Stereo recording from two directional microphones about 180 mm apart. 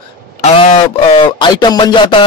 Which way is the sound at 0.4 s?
35° left (ahead or behind).